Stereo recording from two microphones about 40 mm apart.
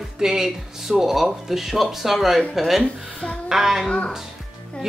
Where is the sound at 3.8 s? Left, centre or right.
Left.